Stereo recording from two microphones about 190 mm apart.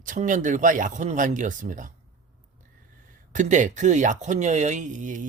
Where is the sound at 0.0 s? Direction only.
45° right (ahead or behind).